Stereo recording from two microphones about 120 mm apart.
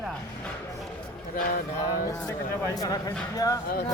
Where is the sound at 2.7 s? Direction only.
30° left (ahead or behind).